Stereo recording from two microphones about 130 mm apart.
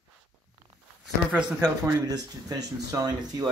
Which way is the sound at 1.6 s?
30° right (ahead or behind).